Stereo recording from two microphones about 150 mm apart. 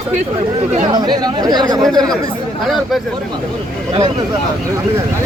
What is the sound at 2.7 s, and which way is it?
Speech, centre (ahead or behind).